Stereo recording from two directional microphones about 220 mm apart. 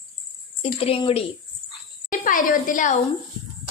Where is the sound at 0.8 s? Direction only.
25° left (ahead or behind).